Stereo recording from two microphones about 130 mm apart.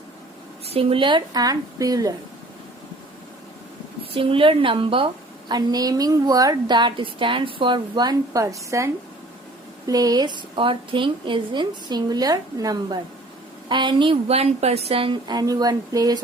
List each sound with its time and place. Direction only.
0.7 s a woman's voice: 45° right (ahead or behind); by 2.1 s 25° right (ahead or behind)
4.1 s a woman's voice: 45° right (ahead or behind)
5.5 s a woman's voice: 30° right (ahead or behind)